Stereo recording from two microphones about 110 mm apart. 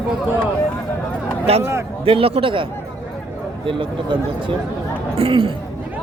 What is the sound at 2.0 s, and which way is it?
Speech, 60° right (ahead or behind).